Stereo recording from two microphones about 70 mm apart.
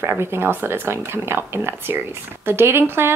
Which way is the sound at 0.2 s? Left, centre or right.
Right.